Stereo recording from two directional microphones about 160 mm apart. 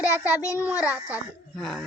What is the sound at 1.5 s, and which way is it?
Speech, 5° left (ahead or behind).